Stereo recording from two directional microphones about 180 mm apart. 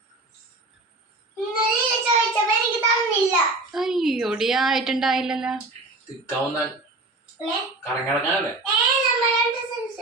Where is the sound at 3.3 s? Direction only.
Centre (ahead or behind).